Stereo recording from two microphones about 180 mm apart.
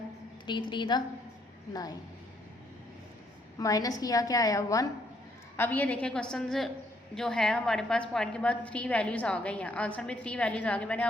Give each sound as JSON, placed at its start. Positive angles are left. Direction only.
{"t": 0.7, "sound": "a woman's voice", "side_deg": 25}
{"t": 3.6, "sound": "a woman's voice", "side_deg": 20}